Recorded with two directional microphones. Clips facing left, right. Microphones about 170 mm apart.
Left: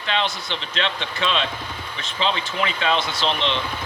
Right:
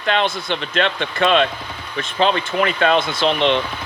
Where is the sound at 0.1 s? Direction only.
55° right (ahead or behind).